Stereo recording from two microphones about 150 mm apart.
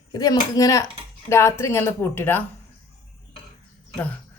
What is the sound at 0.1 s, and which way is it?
Speech, 25° left (ahead or behind).